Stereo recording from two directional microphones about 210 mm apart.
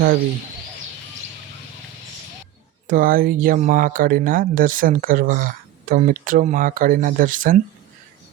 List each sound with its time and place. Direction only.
2.8 s speech: 40° right (ahead or behind)